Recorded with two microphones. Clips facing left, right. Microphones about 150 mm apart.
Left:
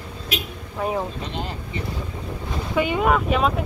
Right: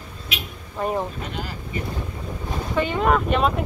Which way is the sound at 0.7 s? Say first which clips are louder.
Even; centre (ahead or behind).